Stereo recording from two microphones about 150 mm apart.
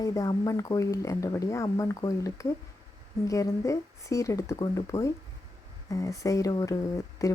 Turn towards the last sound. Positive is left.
turn(degrees=20)  # may be behind; listen again after turning